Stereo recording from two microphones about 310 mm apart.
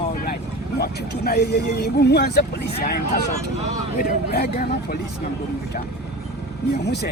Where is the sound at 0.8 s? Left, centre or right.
Left.